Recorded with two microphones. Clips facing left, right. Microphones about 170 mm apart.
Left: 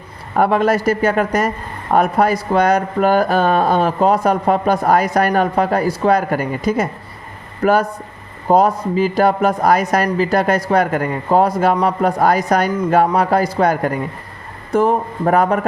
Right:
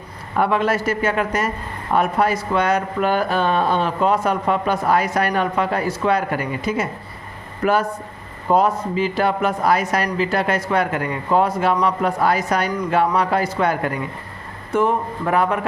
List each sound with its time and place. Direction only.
0.3 s speech: 40° left (ahead or behind)